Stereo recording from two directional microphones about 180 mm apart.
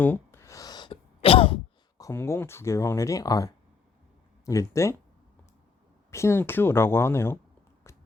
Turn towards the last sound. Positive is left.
turn(degrees=15)  # may be behind; listen again after turning